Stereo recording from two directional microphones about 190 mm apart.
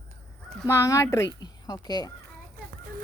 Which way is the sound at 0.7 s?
15° left (ahead or behind).